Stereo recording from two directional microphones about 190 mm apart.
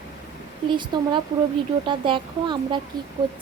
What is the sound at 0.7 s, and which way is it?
Speech, 25° right (ahead or behind).